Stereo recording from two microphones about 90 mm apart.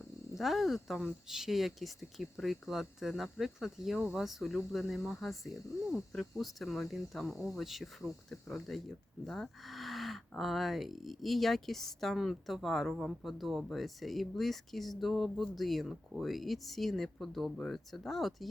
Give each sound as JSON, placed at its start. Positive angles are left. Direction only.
{"t": 0.3, "sound": "speech", "side_deg": 0}